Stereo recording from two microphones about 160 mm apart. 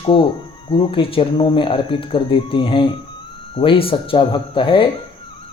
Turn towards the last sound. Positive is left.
turn(degrees=30)  # may be behind; listen again after turning